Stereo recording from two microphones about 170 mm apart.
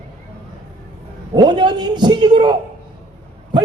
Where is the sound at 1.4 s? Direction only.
25° right (ahead or behind).